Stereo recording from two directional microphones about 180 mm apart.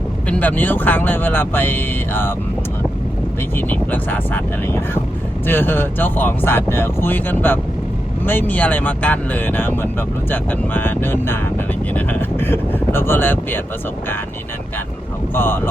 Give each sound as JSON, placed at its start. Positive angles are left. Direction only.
{"t": 0.3, "sound": "speech", "side_deg": 10}
{"t": 3.5, "sound": "speech", "side_deg": 10}
{"t": 15.4, "sound": "speech", "side_deg": 10}